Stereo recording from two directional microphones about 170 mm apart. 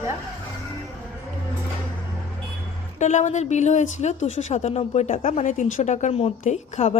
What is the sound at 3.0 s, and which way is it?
A woman's voice, 45° left (ahead or behind).